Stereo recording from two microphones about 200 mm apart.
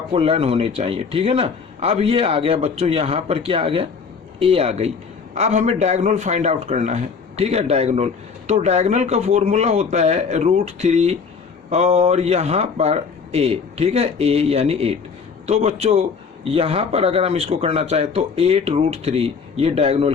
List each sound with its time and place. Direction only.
0.1 s a man's voice: 30° right (ahead or behind)